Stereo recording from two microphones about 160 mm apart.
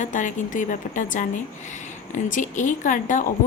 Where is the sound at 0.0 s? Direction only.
50° left (ahead or behind).